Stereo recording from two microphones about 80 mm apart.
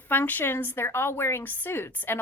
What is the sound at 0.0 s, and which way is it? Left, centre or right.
A woman's voice, left.